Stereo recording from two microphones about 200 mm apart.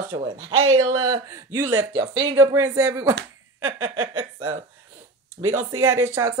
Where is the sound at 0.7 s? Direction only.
90° right.